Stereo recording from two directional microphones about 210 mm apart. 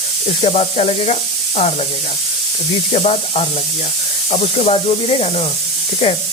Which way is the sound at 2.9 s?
30° left (ahead or behind).